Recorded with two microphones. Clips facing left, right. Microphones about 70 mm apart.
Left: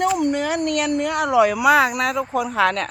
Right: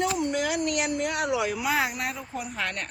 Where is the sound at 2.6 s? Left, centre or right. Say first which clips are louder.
Left 14 dB; left.